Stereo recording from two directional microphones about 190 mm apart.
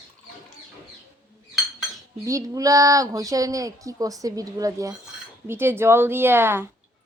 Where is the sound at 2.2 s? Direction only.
15° right (ahead or behind).